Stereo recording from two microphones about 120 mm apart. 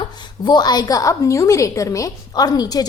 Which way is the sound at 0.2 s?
35° left (ahead or behind).